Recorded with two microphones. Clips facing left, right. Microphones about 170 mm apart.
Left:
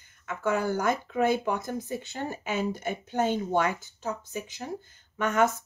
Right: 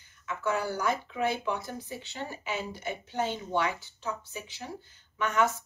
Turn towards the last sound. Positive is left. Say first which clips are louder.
# left 3 dB
turn(degrees=50)  # may be behind; listen again after turning